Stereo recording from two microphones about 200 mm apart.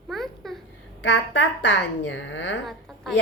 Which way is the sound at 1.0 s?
65° left (ahead or behind).